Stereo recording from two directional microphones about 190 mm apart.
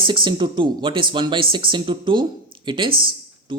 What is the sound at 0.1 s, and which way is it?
A man's voice, 25° right (ahead or behind).